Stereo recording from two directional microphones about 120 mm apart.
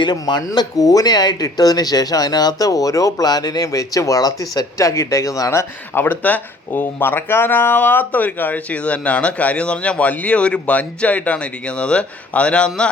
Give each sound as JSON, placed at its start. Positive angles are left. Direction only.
{"t": 0.0, "sound": "speech", "side_deg": 35}